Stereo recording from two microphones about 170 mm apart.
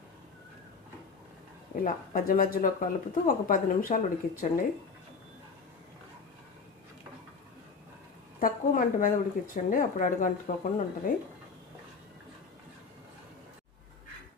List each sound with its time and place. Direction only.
1.7 s speech: 55° left (ahead or behind)
8.4 s a woman's voice: 55° left (ahead or behind)